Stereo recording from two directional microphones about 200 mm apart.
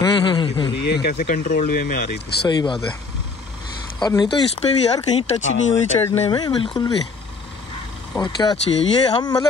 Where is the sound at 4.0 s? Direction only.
20° left (ahead or behind).